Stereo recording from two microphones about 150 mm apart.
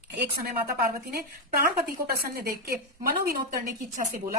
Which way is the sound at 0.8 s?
85° right.